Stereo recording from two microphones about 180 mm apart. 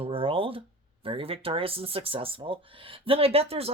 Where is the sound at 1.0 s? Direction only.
30° right (ahead or behind).